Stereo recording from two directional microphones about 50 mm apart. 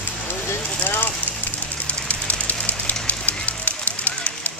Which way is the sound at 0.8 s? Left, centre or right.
Left.